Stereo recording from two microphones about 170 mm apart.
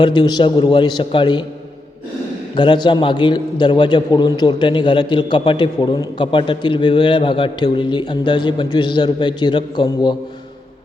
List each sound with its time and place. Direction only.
0.0 s a man's voice: 25° left (ahead or behind)
2.6 s a man's voice: 25° left (ahead or behind)